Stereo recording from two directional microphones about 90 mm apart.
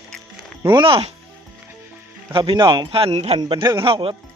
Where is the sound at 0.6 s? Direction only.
70° right (ahead or behind).